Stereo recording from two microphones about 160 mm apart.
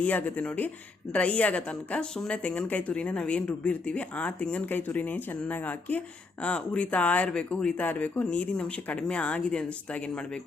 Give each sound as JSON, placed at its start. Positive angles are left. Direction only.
{"t": 0.0, "sound": "a woman's voice", "side_deg": 10}